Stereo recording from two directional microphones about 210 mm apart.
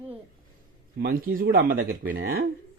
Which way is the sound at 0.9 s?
45° right (ahead or behind).